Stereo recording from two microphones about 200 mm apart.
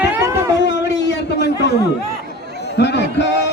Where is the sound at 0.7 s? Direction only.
60° left (ahead or behind).